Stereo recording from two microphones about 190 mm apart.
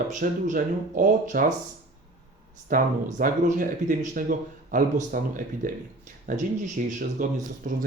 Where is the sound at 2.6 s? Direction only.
45° right (ahead or behind).